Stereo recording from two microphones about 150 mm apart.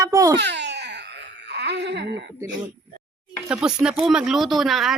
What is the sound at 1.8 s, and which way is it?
Speech, 90° right.